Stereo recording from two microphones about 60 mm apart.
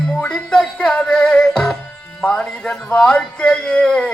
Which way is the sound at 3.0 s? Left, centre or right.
Centre.